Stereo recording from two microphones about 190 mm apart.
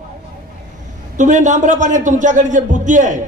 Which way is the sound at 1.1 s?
40° right (ahead or behind).